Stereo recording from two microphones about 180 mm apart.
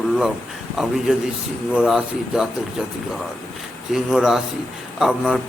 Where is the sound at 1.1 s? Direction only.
5° right (ahead or behind).